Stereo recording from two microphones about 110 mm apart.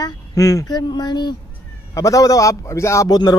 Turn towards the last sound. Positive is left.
turn(degrees=25)  # may be behind; listen again after turning